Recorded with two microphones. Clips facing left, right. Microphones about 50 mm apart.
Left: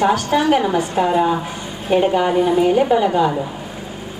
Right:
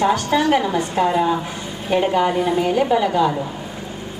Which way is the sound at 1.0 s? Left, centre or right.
Centre.